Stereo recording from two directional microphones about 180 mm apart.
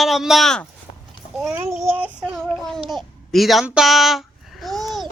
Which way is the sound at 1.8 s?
10° right (ahead or behind).